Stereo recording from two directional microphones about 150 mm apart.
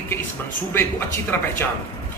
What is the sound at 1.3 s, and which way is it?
Speech, 15° left (ahead or behind).